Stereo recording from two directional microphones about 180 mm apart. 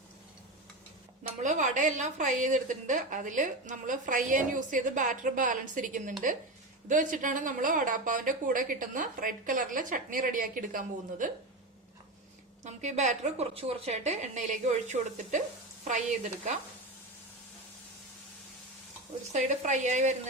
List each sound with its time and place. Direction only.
1.4 s speech: 45° right (ahead or behind)
12.6 s a woman's voice: 40° right (ahead or behind)
19.3 s a woman's voice: 40° right (ahead or behind)